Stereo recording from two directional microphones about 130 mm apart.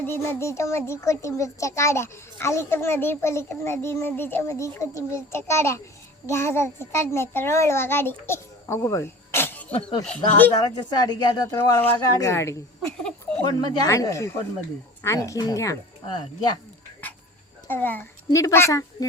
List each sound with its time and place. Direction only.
0.0 s a child's voice: 20° left (ahead or behind)
10.8 s a child's voice: 30° left (ahead or behind)
13.4 s a child's voice: 30° left (ahead or behind)
17.7 s a child's voice: 15° left (ahead or behind)